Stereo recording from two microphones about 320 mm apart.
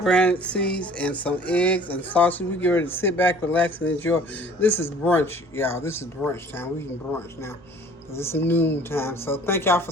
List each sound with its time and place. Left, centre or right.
0.0 s a sound: centre
3.8 s speech: left
4.6 s speech: centre